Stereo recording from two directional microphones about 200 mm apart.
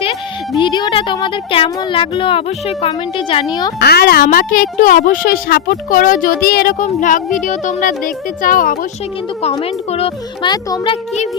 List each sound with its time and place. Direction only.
0.0 s speech: 25° left (ahead or behind)
3.8 s a child's voice: 50° left (ahead or behind)
9.4 s speech: 30° left (ahead or behind)